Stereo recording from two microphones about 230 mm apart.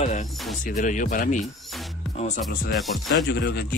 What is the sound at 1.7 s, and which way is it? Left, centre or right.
Music, centre.